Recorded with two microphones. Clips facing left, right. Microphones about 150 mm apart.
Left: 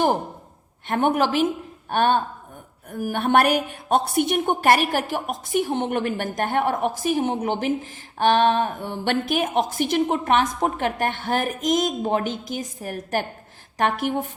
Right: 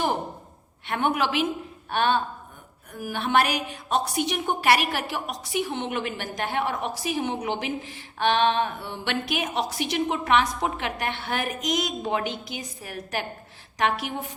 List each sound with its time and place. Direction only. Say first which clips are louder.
0.9 s speech: left 4 dB; 45° left (ahead or behind)